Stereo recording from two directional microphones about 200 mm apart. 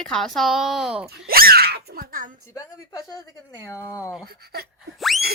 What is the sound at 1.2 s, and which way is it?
A child's voice, 50° right (ahead or behind).